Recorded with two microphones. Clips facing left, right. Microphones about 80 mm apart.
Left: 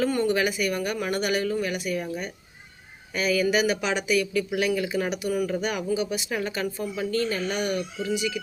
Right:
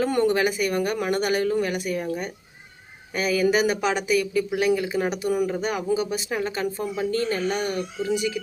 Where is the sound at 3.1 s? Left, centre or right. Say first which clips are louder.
Right 2 dB; right.